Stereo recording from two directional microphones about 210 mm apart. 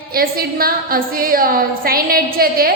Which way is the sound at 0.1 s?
45° right (ahead or behind).